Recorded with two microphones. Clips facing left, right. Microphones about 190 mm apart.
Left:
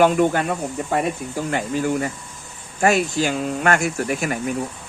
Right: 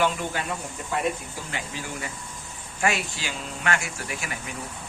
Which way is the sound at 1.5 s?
50° left (ahead or behind).